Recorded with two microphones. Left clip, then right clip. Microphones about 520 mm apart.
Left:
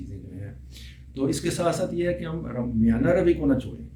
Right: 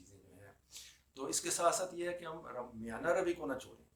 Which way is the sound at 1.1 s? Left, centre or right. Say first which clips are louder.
Left 13 dB; centre.